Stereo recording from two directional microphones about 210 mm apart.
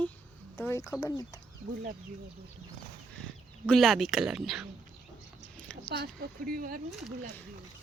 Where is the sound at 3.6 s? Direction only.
Centre (ahead or behind).